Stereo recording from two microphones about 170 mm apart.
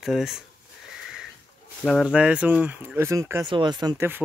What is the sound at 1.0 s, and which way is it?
Sniff, 5° right (ahead or behind).